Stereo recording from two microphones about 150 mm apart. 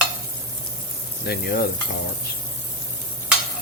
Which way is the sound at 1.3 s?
90° left.